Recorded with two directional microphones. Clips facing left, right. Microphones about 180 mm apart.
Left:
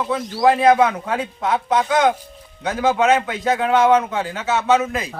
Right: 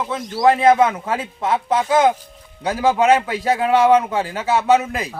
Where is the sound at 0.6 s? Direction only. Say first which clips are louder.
Even; 25° right (ahead or behind).